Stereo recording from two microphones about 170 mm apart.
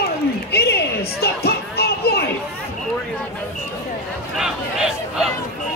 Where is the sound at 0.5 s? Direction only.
75° left (ahead or behind).